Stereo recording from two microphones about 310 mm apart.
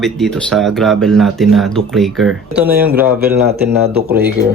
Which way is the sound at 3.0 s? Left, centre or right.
Right.